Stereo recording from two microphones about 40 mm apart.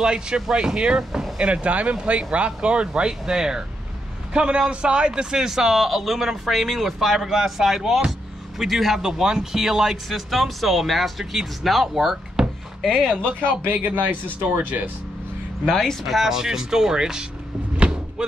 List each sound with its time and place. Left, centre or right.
0.0 s speech: right
1.4 s a man's voice: right; by 12.4 s centre
12.8 s speech: centre
13.7 s speech: right
15.6 s speech: centre
16.2 s a man's voice: centre